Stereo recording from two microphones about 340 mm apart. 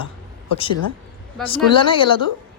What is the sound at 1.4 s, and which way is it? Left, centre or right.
Speech, centre.